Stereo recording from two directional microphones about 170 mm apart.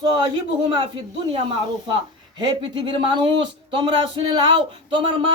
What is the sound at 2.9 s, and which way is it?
A man's voice, 25° right (ahead or behind).